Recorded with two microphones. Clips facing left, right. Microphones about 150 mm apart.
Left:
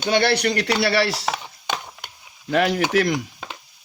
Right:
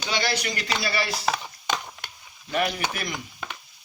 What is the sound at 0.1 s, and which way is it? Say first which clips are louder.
Speech: left 9 dB; 65° left (ahead or behind).